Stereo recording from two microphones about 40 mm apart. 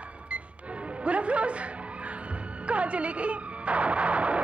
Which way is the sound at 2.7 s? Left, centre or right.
Right.